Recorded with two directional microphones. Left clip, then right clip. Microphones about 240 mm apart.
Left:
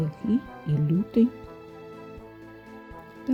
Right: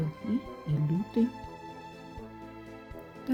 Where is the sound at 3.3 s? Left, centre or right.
Centre.